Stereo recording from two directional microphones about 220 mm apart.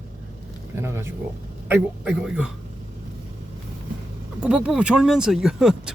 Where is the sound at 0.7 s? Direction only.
10° right (ahead or behind).